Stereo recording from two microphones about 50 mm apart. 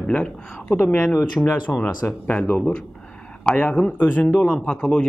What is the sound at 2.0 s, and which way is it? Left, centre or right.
Speech, left.